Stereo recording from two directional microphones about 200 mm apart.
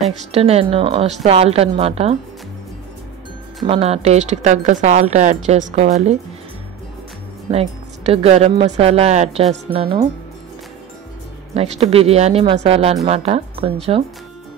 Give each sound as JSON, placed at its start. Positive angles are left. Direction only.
{"t": 0.2, "sound": "speech", "side_deg": -30}
{"t": 3.6, "sound": "speech", "side_deg": -30}
{"t": 7.5, "sound": "speech", "side_deg": -30}
{"t": 11.5, "sound": "speech", "side_deg": -30}